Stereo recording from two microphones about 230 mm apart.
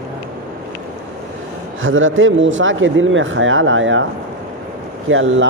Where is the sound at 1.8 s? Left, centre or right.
Right.